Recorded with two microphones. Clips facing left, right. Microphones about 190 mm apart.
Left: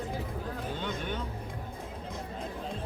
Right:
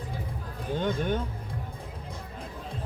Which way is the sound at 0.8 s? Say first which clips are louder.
Right 10 dB; 45° right (ahead or behind).